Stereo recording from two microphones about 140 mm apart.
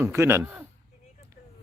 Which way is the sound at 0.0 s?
20° right (ahead or behind).